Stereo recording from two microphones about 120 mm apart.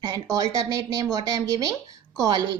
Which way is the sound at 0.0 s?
35° right (ahead or behind).